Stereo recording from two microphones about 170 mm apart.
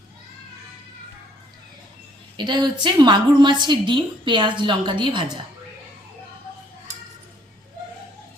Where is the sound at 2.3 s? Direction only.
25° right (ahead or behind).